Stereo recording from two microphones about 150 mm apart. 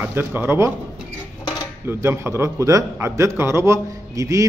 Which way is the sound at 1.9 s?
15° right (ahead or behind).